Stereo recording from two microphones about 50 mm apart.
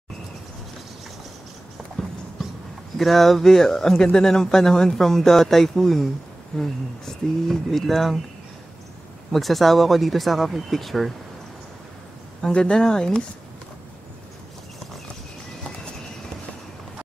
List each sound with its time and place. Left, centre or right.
3.0 s speech: centre
9.3 s speech: centre
12.4 s speech: centre